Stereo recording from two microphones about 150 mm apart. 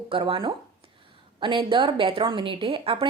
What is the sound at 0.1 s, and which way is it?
Speech, 35° right (ahead or behind).